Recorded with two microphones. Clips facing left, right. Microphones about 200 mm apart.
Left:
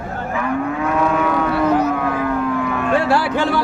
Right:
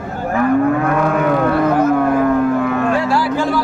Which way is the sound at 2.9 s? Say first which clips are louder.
Even; 65° left (ahead or behind).